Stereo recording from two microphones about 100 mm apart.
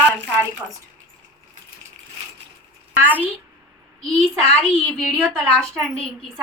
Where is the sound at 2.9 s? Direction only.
20° right (ahead or behind).